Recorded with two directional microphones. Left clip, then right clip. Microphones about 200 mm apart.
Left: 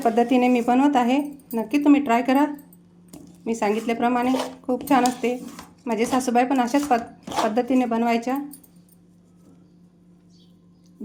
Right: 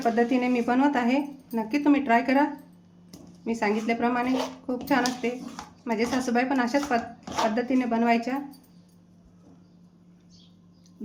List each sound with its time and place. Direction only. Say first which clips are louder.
0.0 s speech: left 5 dB; 30° left (ahead or behind)